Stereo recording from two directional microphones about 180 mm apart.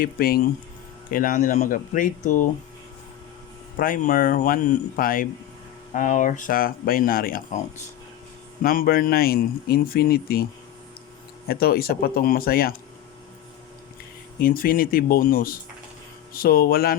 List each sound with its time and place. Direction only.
0.0 s speech: 55° left (ahead or behind)
3.8 s speech: 50° left (ahead or behind)
8.6 s speech: 55° left (ahead or behind)
11.4 s speech: 55° left (ahead or behind)
14.3 s speech: 55° left (ahead or behind)